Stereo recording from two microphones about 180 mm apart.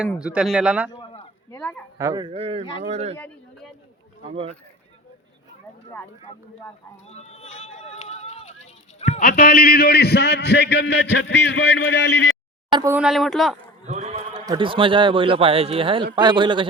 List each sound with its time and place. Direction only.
0.2 s speech: 5° right (ahead or behind)
0.9 s a sound: 30° left (ahead or behind)
1.5 s speech: 5° left (ahead or behind)
2.0 s a man's voice: 20° right (ahead or behind)
2.2 s speech: 30° right (ahead or behind)
3.2 s a sound: 5° left (ahead or behind)
7.1 s run: 35° left (ahead or behind)
8.6 s a man's voice: 40° left (ahead or behind); by 12.3 s 80° left
12.9 s speech: 5° right (ahead or behind)
13.8 s sheep: 40° right (ahead or behind)
14.4 s a man's voice: 25° right (ahead or behind)